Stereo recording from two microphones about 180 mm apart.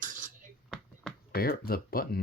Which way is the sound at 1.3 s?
55° left (ahead or behind).